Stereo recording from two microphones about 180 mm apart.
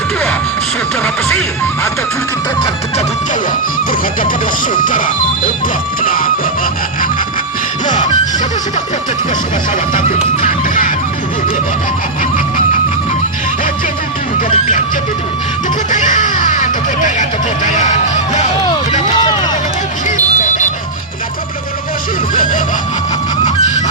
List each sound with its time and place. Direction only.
4.7 s speech: 45° left (ahead or behind)
6.0 s music: 50° left (ahead or behind)
7.9 s music: 25° left (ahead or behind)
10.4 s music: 45° left (ahead or behind)
15.9 s music: 45° left (ahead or behind)
20.1 s a sound: 45° left (ahead or behind)